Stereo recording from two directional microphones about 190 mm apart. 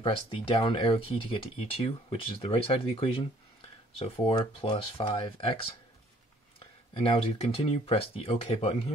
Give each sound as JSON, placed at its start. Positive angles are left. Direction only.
{"t": 0.0, "sound": "speech", "side_deg": 30}
{"t": 6.6, "sound": "speech", "side_deg": 25}